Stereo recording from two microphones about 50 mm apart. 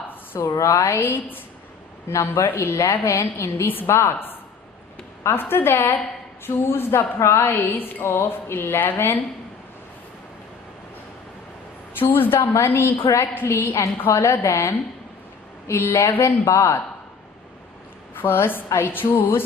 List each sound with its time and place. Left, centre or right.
0.6 s a woman's voice: left
3.0 s a woman's voice: left
3.8 s a woman's voice: left
11.9 s a woman's voice: left
15.6 s a woman's voice: left
18.1 s a woman's voice: left